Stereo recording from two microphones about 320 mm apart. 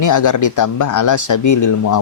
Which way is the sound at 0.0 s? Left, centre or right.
Left.